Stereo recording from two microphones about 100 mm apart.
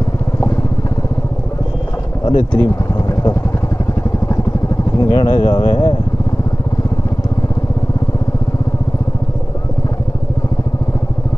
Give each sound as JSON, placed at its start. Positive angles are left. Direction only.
{"t": 2.2, "sound": "speech", "side_deg": 45}
{"t": 4.9, "sound": "speech", "side_deg": 45}